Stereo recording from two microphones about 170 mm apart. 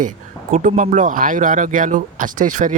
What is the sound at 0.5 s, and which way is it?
Speech, 50° right (ahead or behind).